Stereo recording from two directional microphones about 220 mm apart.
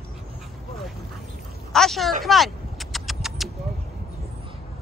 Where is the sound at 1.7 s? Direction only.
Centre (ahead or behind).